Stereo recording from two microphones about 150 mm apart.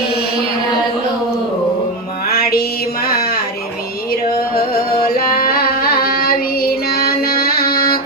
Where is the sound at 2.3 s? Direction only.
90° left.